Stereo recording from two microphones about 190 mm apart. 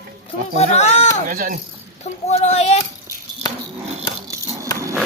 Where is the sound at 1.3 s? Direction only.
45° right (ahead or behind).